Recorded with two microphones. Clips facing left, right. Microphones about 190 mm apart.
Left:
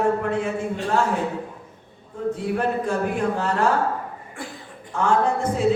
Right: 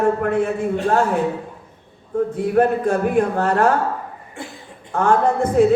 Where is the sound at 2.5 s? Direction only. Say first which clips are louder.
Right 10 dB; 55° right (ahead or behind).